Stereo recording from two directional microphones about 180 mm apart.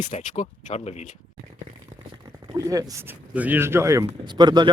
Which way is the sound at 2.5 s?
20° right (ahead or behind).